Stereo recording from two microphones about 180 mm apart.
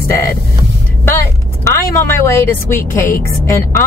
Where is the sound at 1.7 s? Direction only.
15° left (ahead or behind).